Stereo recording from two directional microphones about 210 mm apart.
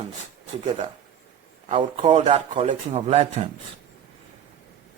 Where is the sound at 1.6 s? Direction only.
30° right (ahead or behind).